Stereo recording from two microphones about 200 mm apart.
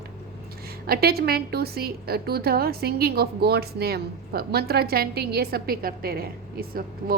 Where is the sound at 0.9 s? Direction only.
50° right (ahead or behind).